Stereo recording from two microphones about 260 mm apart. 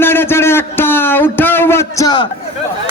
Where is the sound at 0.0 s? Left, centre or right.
Centre.